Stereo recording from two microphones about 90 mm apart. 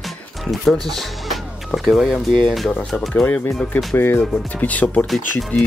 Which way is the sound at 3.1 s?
15° left (ahead or behind).